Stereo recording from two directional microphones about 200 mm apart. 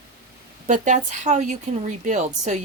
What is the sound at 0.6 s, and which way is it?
A woman's voice, 35° right (ahead or behind).